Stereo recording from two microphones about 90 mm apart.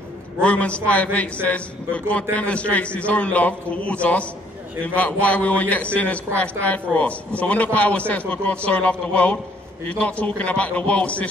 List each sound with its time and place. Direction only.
0.4 s a man's voice: 15° left (ahead or behind)